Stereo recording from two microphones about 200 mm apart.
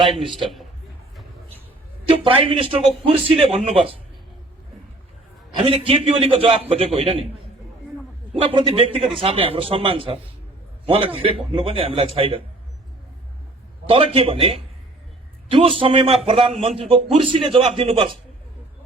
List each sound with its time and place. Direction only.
0.0 s a man's voice: centre (ahead or behind)
2.0 s a man's voice: 25° right (ahead or behind)
5.6 s a man's voice: 25° right (ahead or behind)
8.4 s a man's voice: 25° right (ahead or behind)
13.8 s a man's voice: 30° right (ahead or behind)